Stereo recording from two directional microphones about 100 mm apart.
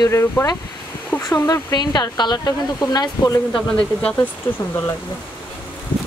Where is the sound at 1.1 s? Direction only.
20° left (ahead or behind).